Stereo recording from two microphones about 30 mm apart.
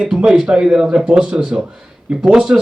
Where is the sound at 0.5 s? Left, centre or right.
Right.